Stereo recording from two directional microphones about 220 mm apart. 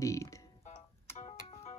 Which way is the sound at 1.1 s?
30° left (ahead or behind).